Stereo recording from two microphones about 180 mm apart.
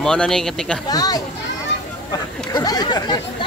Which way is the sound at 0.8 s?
20° left (ahead or behind).